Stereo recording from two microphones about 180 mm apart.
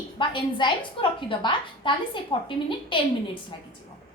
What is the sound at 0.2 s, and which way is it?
A woman's voice, 25° left (ahead or behind).